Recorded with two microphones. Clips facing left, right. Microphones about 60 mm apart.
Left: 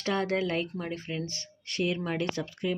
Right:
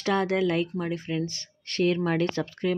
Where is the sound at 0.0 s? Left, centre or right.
Right.